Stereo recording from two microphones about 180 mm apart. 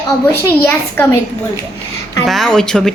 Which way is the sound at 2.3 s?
Centre (ahead or behind).